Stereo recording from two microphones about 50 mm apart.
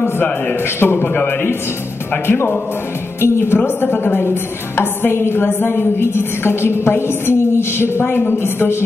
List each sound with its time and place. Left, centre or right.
0.7 s a woman's voice: left
2.2 s a woman's voice: left